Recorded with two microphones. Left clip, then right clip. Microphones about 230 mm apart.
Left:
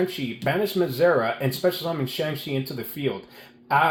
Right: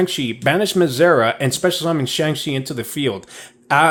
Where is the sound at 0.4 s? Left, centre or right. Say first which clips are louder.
Right 7 dB; right.